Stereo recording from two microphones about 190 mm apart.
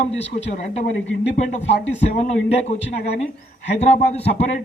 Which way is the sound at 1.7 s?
65° left (ahead or behind).